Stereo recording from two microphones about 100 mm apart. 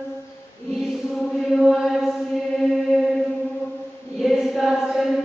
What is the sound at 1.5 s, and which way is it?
Chant, centre (ahead or behind).